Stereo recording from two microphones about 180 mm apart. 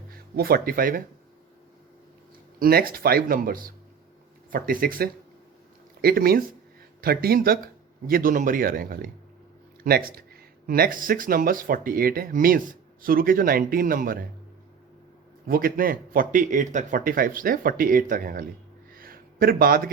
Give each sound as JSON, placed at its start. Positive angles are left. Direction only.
{"t": 0.1, "sound": "speech", "side_deg": -55}
{"t": 2.6, "sound": "speech", "side_deg": -55}
{"t": 15.4, "sound": "speech", "side_deg": -55}
{"t": 18.9, "sound": "a sound", "side_deg": -55}